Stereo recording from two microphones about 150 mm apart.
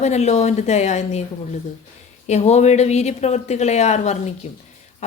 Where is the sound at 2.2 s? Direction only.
45° left (ahead or behind).